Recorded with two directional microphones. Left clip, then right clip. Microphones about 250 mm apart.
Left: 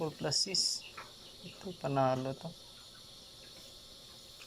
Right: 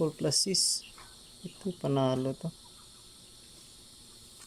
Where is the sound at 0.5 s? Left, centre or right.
Right.